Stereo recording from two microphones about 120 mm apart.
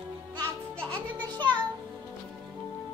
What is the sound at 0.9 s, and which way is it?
Music, 40° right (ahead or behind).